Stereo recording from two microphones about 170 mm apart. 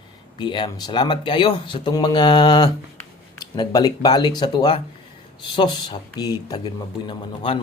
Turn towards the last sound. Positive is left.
turn(degrees=30)  # may be behind; listen again after turning